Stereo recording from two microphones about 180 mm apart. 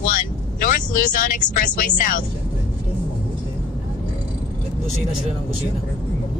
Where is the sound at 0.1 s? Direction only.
50° left (ahead or behind).